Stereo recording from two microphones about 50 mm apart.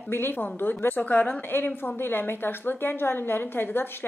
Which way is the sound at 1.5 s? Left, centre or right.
Left.